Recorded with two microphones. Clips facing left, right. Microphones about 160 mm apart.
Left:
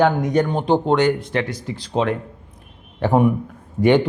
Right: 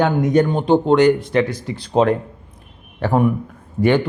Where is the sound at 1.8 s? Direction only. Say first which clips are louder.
Right 5 dB; 45° right (ahead or behind).